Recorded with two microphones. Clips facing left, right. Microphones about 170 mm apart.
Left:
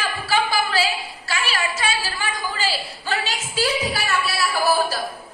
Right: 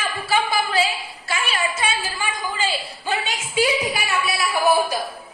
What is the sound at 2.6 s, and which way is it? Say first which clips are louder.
A woman's voice: right 1 dB; 20° right (ahead or behind).